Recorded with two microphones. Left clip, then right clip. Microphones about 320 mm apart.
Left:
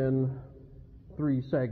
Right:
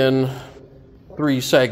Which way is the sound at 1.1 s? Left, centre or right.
Centre.